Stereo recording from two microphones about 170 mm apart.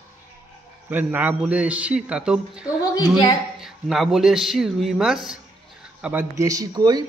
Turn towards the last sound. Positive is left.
turn(degrees=-25)  # may be behind; listen again after turning